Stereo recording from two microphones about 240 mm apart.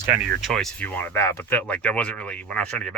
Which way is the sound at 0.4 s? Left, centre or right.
Centre.